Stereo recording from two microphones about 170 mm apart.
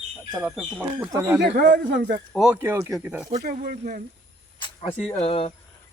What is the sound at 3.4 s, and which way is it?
Speech, 55° right (ahead or behind).